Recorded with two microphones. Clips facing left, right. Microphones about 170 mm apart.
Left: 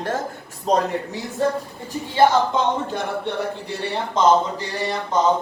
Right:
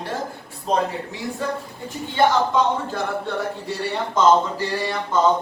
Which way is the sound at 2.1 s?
25° left (ahead or behind).